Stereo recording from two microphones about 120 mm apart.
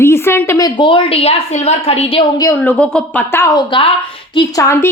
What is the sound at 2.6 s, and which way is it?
Speech, 10° left (ahead or behind).